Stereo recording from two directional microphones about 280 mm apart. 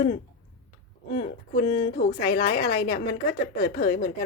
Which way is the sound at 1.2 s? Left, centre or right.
Left.